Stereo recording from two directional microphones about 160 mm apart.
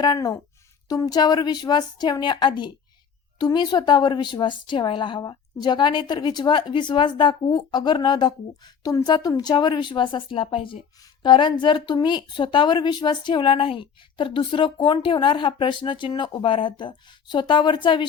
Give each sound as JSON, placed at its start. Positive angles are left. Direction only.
{"t": 0.0, "sound": "a woman's voice", "side_deg": 25}